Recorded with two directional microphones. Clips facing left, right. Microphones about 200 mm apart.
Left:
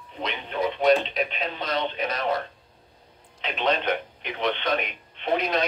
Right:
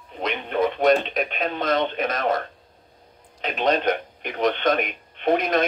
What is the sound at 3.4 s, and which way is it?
Speech, 45° right (ahead or behind).